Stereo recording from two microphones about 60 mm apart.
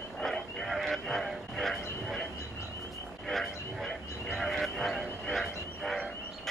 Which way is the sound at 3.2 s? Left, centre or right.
Centre.